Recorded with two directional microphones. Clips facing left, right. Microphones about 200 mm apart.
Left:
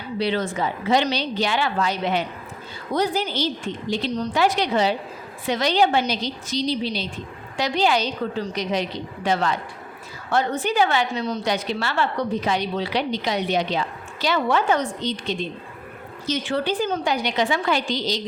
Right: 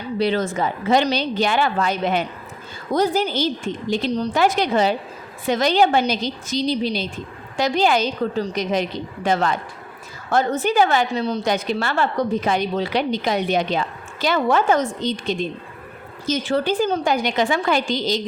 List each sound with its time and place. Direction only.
0.2 s a woman's voice: 45° right (ahead or behind)
11.4 s a woman's voice: 50° right (ahead or behind)